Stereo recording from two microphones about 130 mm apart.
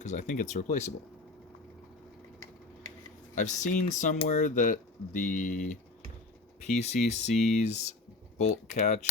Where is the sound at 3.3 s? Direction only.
70° left (ahead or behind).